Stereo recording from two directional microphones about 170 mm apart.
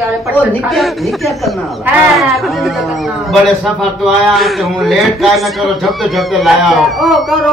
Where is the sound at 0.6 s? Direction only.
Centre (ahead or behind).